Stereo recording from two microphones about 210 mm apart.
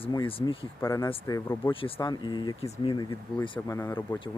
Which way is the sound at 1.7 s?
25° left (ahead or behind).